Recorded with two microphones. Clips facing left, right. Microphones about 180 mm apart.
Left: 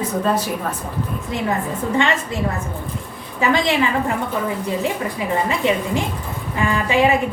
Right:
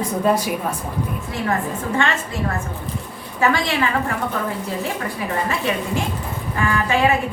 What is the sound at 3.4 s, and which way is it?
Speech, 20° left (ahead or behind).